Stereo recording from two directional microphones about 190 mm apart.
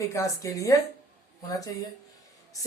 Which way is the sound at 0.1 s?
15° left (ahead or behind).